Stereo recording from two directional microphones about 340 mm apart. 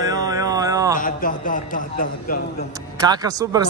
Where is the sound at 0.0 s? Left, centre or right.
Centre.